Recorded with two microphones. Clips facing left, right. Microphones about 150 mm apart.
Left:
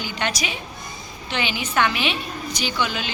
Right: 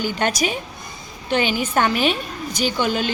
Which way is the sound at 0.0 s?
45° right (ahead or behind).